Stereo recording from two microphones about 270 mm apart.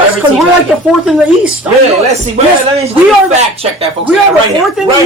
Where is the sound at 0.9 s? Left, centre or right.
Centre.